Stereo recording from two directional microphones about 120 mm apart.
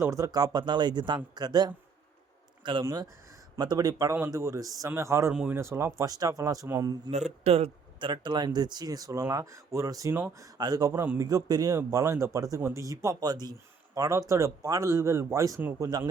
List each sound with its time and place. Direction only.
0.0 s speech: 25° right (ahead or behind)
2.8 s speech: 35° right (ahead or behind)
5.3 s speech: 5° right (ahead or behind)
5.5 s speech: 20° right (ahead or behind)
7.1 s speech: 65° right (ahead or behind)
7.9 s speech: 40° right (ahead or behind)